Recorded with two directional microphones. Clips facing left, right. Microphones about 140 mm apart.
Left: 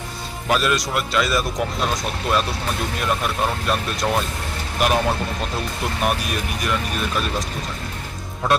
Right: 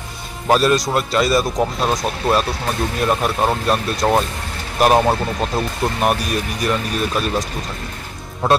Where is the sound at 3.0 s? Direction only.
40° right (ahead or behind).